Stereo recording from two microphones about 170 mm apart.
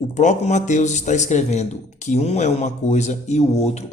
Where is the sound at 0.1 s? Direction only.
45° left (ahead or behind).